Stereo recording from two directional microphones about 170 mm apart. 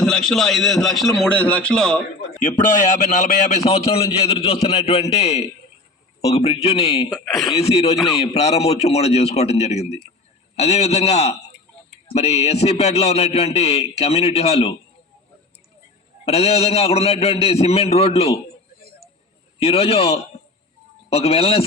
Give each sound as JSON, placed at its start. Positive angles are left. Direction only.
{"t": 0.0, "sound": "a man's voice", "side_deg": 5}
{"t": 3.1, "sound": "a man's voice", "side_deg": 40}
{"t": 7.1, "sound": "a man's voice", "side_deg": 0}
{"t": 7.7, "sound": "a man's voice", "side_deg": 40}
{"t": 16.2, "sound": "a man's voice", "side_deg": 35}
{"t": 19.5, "sound": "a man's voice", "side_deg": 35}